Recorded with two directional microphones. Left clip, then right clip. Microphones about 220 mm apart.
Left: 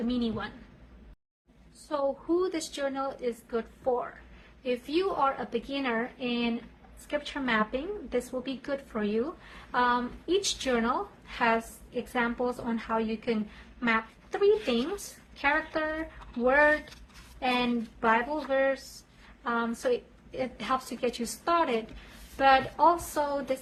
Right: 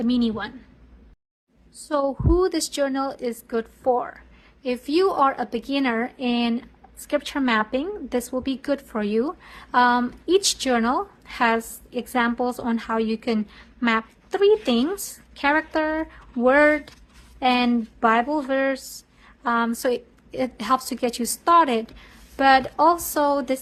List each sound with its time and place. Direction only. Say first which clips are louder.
0.1 s a woman's voice: right 8 dB; 45° right (ahead or behind)
1.9 s a woman's voice: right 7 dB; 45° right (ahead or behind)